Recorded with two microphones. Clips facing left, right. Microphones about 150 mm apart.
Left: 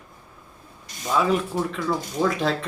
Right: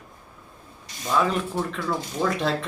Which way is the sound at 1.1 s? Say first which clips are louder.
Left 2 dB; 5° left (ahead or behind).